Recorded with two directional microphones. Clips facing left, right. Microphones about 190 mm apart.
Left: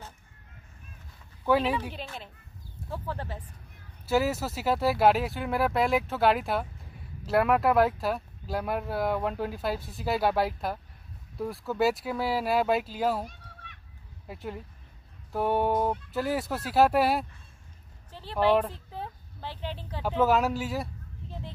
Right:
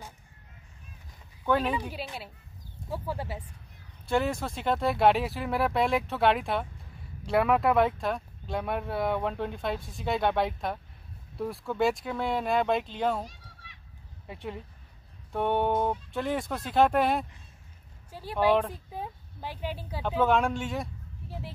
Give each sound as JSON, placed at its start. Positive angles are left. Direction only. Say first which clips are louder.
{"t": 1.9, "sound": "speech", "louder": "right 1 dB", "side_deg": -10}
{"t": 4.0, "sound": "speech", "louder": "left 2 dB", "side_deg": 5}
{"t": 13.3, "sound": "a sound", "louder": "left 3 dB", "side_deg": 55}
{"t": 14.2, "sound": "speech", "louder": "even", "side_deg": 0}
{"t": 18.1, "sound": "speech", "louder": "even", "side_deg": -10}
{"t": 20.2, "sound": "speech", "louder": "left 1 dB", "side_deg": 5}